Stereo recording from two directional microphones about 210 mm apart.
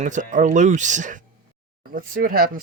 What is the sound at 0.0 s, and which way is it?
Speech, 35° right (ahead or behind).